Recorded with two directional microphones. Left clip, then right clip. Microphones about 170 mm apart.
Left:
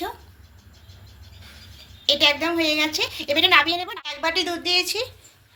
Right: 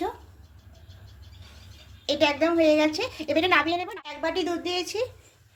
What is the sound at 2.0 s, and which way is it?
Speech, 45° right (ahead or behind).